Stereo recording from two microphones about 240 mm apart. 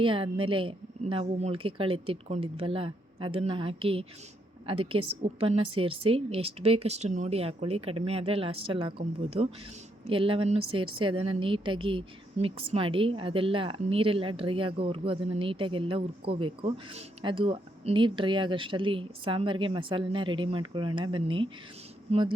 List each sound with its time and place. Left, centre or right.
0.0 s a woman's voice: right